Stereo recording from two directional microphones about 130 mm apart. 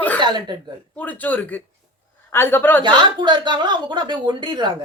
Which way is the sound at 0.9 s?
10° left (ahead or behind).